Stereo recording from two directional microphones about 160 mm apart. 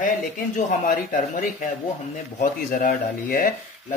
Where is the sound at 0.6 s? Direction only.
50° left (ahead or behind).